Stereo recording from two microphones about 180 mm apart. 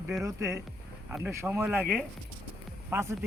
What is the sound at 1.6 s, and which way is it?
Speech, centre (ahead or behind).